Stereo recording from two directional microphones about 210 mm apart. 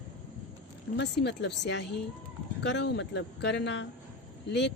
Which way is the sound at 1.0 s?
55° left (ahead or behind).